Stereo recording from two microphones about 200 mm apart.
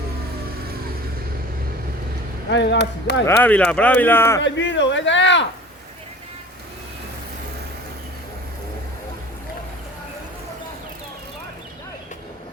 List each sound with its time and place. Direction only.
2.5 s speech: 60° left (ahead or behind)
3.2 s speech: 10° left (ahead or behind)
4.4 s speech: 65° left (ahead or behind)